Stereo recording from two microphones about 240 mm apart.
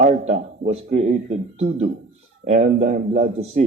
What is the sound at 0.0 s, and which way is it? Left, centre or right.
A man's voice, right.